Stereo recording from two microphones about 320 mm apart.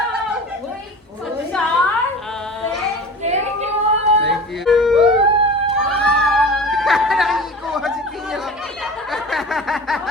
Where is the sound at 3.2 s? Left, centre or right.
Right.